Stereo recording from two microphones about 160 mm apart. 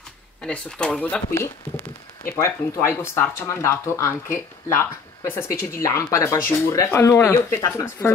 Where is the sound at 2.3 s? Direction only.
15° left (ahead or behind).